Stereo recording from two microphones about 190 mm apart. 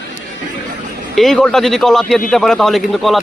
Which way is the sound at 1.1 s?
Centre (ahead or behind).